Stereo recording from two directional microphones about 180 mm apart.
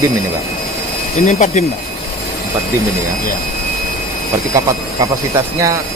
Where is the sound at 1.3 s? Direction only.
40° left (ahead or behind).